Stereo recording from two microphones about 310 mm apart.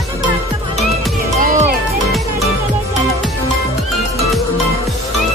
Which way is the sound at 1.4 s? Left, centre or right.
Right.